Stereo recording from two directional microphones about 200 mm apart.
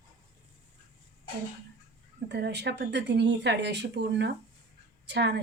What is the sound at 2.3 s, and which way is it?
Speech, 55° right (ahead or behind).